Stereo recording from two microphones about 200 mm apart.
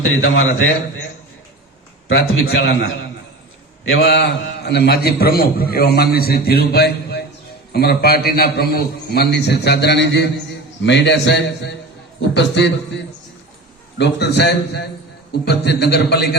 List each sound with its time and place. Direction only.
0.0 s a man's voice: 85° left
2.0 s a man's voice: 90° left
4.0 s a man's voice: 55° left (ahead or behind)
14.0 s a man's voice: 55° left (ahead or behind)